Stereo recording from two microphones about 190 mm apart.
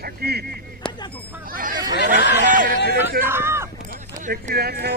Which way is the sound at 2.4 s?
45° right (ahead or behind).